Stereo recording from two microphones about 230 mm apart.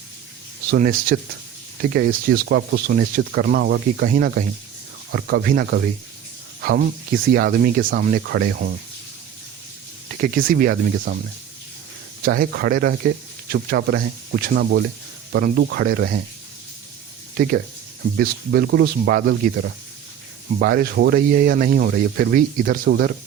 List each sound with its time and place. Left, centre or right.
0.7 s speech: right
10.1 s speech: right
12.2 s speech: right
17.3 s speech: right